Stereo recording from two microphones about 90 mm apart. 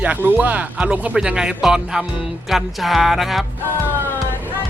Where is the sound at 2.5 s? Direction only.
Centre (ahead or behind).